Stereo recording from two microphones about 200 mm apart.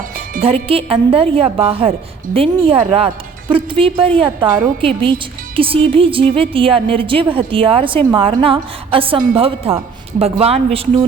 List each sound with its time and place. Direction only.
0.4 s a woman's voice: 30° right (ahead or behind)